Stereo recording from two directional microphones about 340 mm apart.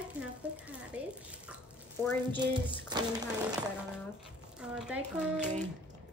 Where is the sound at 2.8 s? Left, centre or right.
Centre.